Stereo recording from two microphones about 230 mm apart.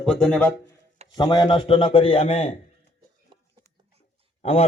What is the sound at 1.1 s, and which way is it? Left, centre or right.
A man's voice, centre.